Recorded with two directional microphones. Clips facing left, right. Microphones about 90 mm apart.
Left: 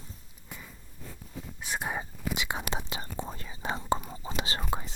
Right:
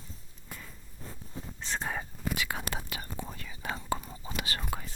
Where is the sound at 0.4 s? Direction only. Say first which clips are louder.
Even; 5° left (ahead or behind).